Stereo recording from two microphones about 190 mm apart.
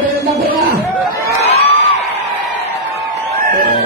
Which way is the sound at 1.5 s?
35° left (ahead or behind).